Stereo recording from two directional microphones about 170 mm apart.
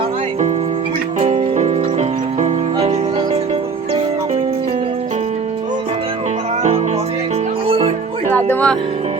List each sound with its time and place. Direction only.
1.5 s horse: 40° right (ahead or behind)
7.7 s music: 40° right (ahead or behind)
8.4 s music: 10° left (ahead or behind)